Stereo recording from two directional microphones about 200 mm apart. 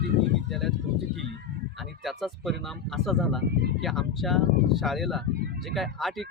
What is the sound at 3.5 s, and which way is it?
Speech, 55° right (ahead or behind).